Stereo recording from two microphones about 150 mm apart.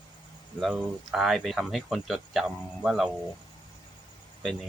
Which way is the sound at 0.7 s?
5° right (ahead or behind).